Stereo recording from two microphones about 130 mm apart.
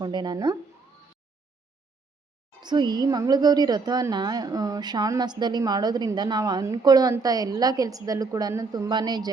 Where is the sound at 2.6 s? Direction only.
35° right (ahead or behind).